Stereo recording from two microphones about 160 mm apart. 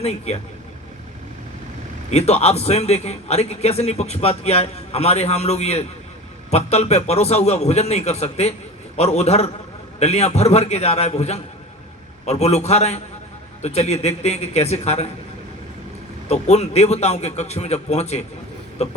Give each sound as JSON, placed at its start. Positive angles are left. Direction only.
{"t": 0.0, "sound": "a man's voice", "side_deg": 40}
{"t": 2.0, "sound": "a man's voice", "side_deg": 40}
{"t": 16.3, "sound": "a man's voice", "side_deg": 40}